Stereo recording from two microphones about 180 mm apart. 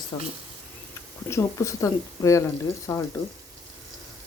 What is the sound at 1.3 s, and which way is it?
Speech, 15° left (ahead or behind).